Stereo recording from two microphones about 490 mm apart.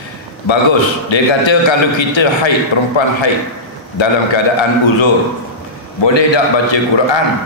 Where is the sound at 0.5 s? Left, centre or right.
Left.